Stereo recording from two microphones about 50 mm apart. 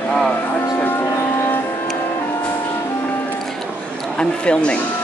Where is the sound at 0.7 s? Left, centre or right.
Left.